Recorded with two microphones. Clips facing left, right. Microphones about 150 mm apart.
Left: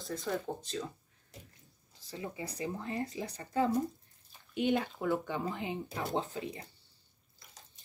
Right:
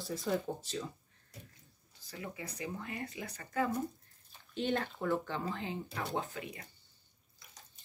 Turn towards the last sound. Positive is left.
turn(degrees=30)  # may be behind; listen again after turning